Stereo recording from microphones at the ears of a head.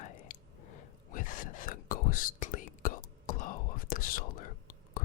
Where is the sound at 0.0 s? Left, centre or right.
Left.